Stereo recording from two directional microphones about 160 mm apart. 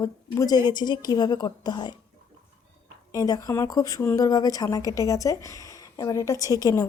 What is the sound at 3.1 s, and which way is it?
A woman's voice, 25° left (ahead or behind).